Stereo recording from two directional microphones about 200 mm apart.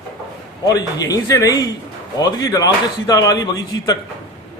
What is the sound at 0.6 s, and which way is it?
A man's voice, 20° left (ahead or behind).